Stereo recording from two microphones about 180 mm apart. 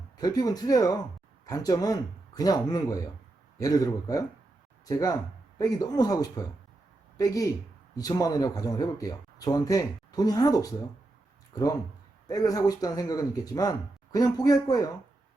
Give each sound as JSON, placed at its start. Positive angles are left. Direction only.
{"t": 0.2, "sound": "speech", "side_deg": 20}